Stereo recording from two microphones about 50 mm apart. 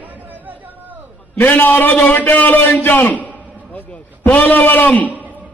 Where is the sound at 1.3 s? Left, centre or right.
Left.